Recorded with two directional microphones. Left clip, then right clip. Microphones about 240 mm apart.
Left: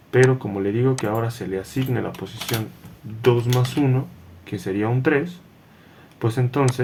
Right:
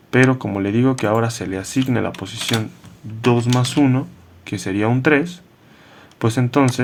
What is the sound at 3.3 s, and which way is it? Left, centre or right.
Speech, right.